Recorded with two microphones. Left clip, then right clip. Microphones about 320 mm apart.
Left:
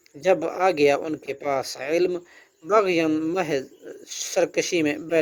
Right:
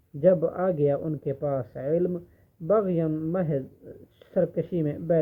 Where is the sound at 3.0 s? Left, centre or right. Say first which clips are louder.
Left 5 dB; left.